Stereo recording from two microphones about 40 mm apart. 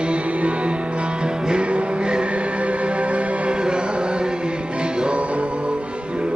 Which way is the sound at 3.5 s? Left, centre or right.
Right.